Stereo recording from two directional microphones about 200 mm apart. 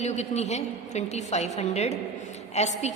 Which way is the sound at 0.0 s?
35° left (ahead or behind).